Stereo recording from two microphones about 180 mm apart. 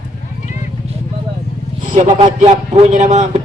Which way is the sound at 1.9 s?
45° right (ahead or behind).